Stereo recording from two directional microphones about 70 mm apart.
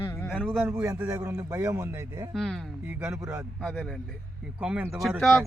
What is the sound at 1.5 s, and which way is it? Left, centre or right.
Speech, right.